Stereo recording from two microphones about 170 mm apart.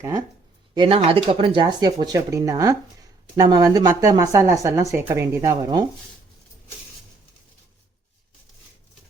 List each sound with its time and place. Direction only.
0.7 s a woman's voice: 30° right (ahead or behind)